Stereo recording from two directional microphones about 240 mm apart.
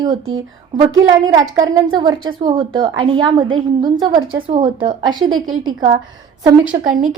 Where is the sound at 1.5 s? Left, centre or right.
Centre.